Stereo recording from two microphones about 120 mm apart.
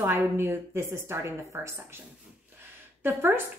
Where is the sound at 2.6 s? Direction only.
20° right (ahead or behind).